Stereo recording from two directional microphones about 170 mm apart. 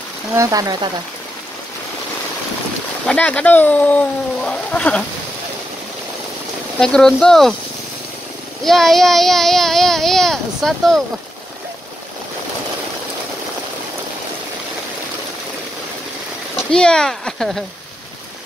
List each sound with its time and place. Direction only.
0.4 s speech: 20° right (ahead or behind)
3.1 s speech: 10° left (ahead or behind)
6.8 s speech: 5° left (ahead or behind)
8.6 s speech: centre (ahead or behind)
16.7 s speech: 5° left (ahead or behind)